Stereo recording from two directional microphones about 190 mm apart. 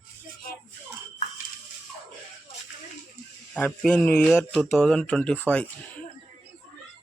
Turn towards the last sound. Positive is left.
turn(degrees=5)  # may be behind; listen again after turning